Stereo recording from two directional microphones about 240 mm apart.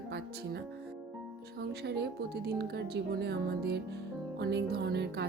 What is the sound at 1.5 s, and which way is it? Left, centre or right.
Speech, right.